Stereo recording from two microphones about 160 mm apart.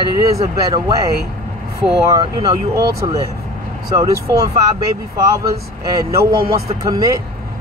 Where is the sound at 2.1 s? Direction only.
25° right (ahead or behind).